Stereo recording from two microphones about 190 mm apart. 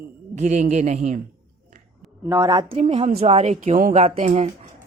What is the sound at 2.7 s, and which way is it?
Speech, 30° right (ahead or behind).